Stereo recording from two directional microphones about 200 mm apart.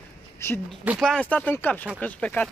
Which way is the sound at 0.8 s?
Centre (ahead or behind).